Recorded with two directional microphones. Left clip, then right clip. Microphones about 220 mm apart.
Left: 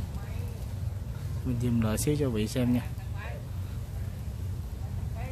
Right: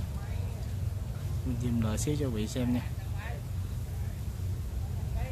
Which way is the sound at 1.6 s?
20° left (ahead or behind).